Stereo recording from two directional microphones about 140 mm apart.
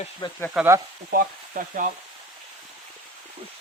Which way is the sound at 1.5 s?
80° right.